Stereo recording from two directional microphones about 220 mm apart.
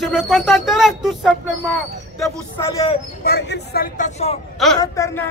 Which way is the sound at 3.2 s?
50° left (ahead or behind).